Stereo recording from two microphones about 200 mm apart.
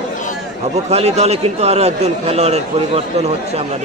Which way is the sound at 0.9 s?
30° right (ahead or behind).